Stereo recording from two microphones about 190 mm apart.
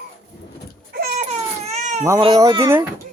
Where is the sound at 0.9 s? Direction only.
50° right (ahead or behind).